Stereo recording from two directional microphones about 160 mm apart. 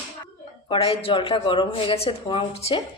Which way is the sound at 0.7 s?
35° left (ahead or behind).